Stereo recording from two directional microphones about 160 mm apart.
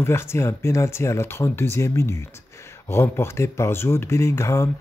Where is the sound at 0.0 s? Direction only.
15° left (ahead or behind).